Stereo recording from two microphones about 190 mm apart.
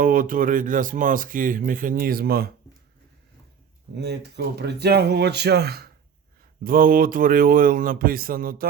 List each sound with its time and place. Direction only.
0.0 s speech: 45° right (ahead or behind)
3.9 s speech: 60° right (ahead or behind)